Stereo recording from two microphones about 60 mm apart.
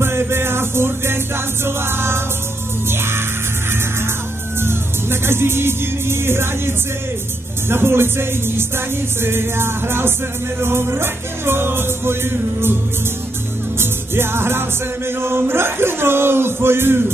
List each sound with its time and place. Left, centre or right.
0.0 s music: right
4.6 s speech: right
13.7 s music: right
15.0 s speech: right